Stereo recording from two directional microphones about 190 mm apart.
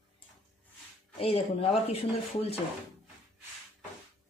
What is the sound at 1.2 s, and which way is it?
Speech, 30° left (ahead or behind).